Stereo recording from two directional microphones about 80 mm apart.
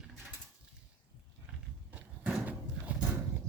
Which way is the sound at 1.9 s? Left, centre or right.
Centre.